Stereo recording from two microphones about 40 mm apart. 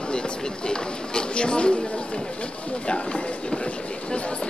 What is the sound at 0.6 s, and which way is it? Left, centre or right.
Speech, left.